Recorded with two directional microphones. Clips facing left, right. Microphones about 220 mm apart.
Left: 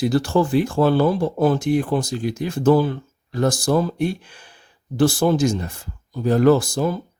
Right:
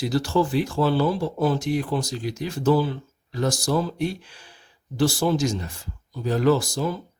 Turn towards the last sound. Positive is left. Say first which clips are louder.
# left 4 dB
turn(degrees=50)  # may be behind; listen again after turning